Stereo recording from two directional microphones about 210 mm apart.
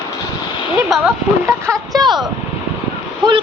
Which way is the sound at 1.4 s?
15° right (ahead or behind).